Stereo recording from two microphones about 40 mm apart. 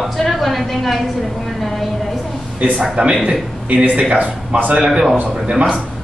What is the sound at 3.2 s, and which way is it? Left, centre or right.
A man's voice, right.